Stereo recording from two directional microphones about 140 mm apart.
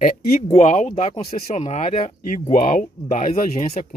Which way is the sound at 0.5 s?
55° left (ahead or behind).